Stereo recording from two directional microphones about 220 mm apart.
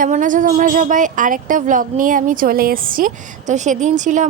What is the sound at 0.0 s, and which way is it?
Speech, 35° right (ahead or behind).